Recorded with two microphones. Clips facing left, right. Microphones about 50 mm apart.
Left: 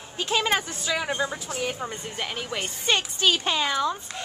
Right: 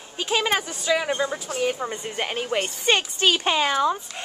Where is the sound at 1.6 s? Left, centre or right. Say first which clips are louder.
Right 5 dB; centre.